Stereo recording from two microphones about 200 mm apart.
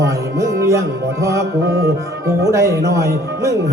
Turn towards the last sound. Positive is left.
turn(degrees=-15)  # may be behind; listen again after turning